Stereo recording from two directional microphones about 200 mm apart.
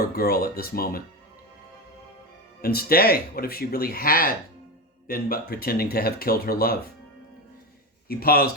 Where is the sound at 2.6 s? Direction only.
50° left (ahead or behind).